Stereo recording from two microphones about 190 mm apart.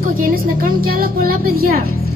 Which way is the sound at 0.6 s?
50° right (ahead or behind).